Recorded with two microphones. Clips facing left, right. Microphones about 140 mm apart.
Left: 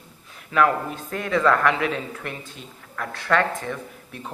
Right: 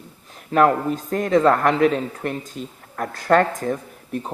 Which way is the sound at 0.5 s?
40° right (ahead or behind).